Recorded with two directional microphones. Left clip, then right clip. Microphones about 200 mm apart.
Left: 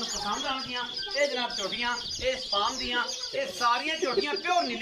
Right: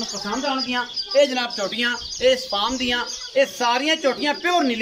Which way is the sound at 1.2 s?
60° right (ahead or behind).